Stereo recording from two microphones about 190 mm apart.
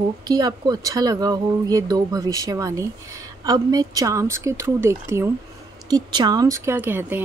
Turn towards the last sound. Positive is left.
turn(degrees=-10)  # may be behind; listen again after turning